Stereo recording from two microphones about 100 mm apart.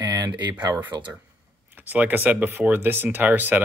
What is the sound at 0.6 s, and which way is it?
Speech, 40° right (ahead or behind).